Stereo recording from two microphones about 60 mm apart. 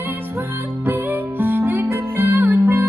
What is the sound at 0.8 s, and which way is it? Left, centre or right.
Music, right.